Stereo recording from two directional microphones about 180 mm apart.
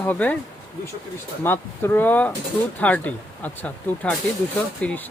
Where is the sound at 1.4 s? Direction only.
10° left (ahead or behind).